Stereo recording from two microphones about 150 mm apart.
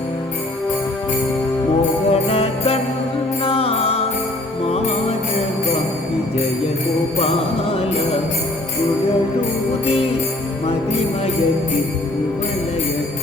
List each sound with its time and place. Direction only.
2.0 s jingle bell: 40° left (ahead or behind)
3.4 s music: 40° left (ahead or behind)
9.8 s jingle bell: 40° left (ahead or behind)